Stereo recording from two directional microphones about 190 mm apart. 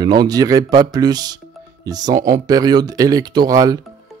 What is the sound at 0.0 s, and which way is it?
Speech, 20° right (ahead or behind).